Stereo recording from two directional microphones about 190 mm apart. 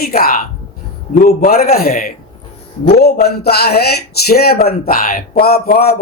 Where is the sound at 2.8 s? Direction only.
60° left (ahead or behind).